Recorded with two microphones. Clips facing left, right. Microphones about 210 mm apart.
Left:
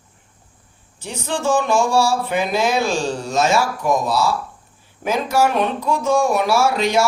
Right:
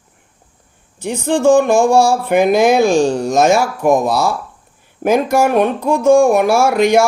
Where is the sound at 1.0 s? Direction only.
55° right (ahead or behind).